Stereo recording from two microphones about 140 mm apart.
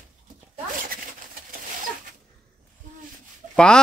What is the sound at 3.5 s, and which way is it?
Speech, 5° left (ahead or behind).